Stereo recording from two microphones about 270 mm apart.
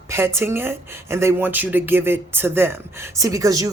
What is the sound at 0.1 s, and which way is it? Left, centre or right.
A woman's voice, centre.